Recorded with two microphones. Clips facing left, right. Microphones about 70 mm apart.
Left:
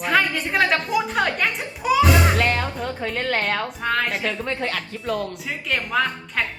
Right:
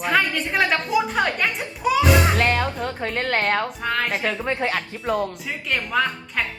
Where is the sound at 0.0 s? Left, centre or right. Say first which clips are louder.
Even; centre.